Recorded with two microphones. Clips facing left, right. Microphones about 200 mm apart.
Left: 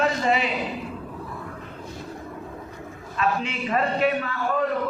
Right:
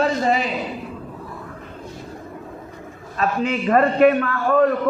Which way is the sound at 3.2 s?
45° right (ahead or behind).